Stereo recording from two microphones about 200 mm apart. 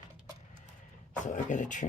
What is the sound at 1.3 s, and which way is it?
Speech, 40° left (ahead or behind).